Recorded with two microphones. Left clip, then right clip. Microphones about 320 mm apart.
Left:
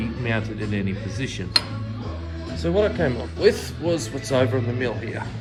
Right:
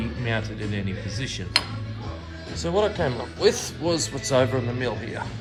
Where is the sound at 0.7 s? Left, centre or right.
Centre.